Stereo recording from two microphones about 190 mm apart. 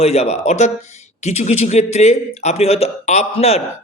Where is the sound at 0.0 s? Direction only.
35° left (ahead or behind).